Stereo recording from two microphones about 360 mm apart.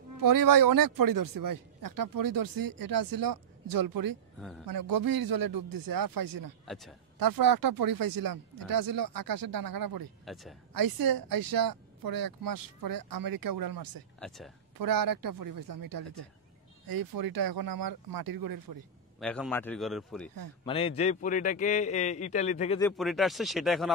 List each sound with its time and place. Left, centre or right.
0.2 s speech: right
4.4 s a man's voice: centre
4.6 s speech: right
6.6 s a man's voice: centre
7.2 s speech: right
10.2 s speech: centre
10.7 s speech: right
14.2 s a man's voice: centre
14.8 s speech: right
19.1 s a man's voice: centre
20.6 s a man's voice: centre
22.8 s a man's voice: centre